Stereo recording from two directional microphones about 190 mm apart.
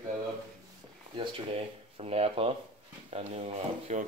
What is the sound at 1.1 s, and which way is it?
Speech, 30° right (ahead or behind).